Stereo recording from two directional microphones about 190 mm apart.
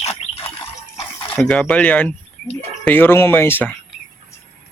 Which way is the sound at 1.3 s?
5° left (ahead or behind).